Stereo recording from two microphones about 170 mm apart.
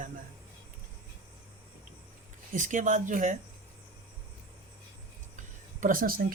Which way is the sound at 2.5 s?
50° right (ahead or behind).